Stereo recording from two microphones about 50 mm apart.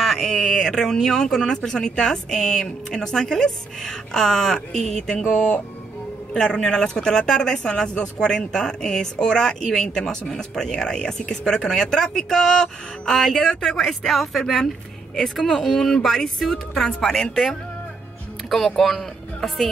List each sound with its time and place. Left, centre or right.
0.0 s speech: centre
5.1 s speech: left
6.3 s speech: centre
18.8 s speech: centre